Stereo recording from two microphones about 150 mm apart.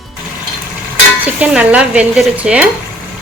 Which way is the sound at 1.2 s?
10° right (ahead or behind).